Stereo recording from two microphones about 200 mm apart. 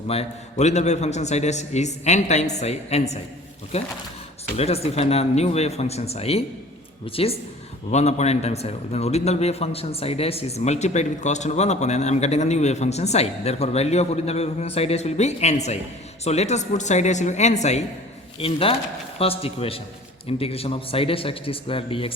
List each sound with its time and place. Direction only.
0.1 s a man's voice: 30° left (ahead or behind)